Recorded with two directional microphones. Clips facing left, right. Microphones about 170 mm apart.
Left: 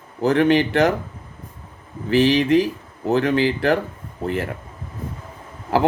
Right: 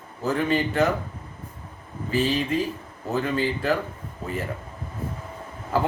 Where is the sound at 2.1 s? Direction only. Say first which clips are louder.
Left 8 dB; 80° left.